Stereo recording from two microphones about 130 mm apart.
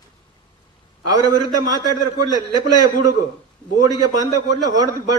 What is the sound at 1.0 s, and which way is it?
A man's voice, 30° right (ahead or behind).